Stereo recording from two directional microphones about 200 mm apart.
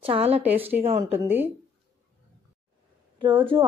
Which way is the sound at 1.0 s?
15° right (ahead or behind).